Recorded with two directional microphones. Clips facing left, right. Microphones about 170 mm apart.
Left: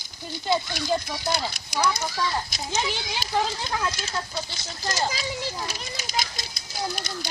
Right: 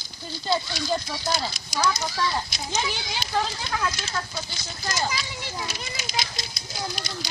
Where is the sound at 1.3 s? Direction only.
60° left (ahead or behind).